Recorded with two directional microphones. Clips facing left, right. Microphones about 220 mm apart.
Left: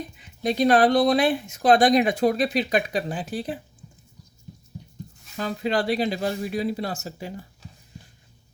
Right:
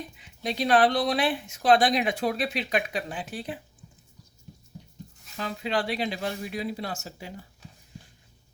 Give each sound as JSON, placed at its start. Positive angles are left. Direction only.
{"t": 0.2, "sound": "speech", "side_deg": 45}
{"t": 5.4, "sound": "speech", "side_deg": 40}